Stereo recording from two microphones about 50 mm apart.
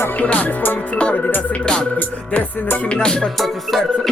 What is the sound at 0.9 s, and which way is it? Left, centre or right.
Music, left.